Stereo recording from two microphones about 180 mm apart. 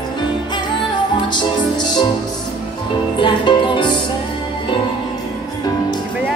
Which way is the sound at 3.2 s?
25° left (ahead or behind).